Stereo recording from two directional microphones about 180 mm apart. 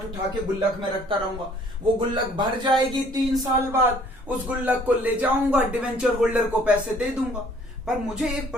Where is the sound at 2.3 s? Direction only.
25° right (ahead or behind).